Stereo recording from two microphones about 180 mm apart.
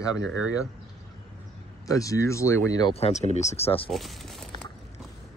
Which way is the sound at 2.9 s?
35° left (ahead or behind).